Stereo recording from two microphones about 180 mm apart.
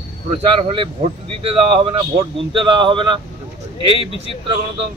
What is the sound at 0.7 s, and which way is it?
Speech, 30° right (ahead or behind).